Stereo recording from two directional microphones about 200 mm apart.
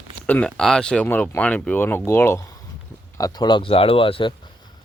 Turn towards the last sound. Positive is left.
turn(degrees=25)  # may be behind; listen again after turning